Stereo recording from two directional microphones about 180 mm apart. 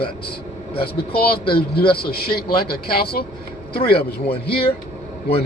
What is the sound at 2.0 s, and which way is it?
A man's voice, 60° left (ahead or behind).